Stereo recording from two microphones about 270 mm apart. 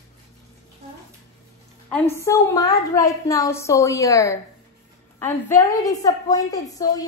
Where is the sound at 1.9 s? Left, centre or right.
Centre.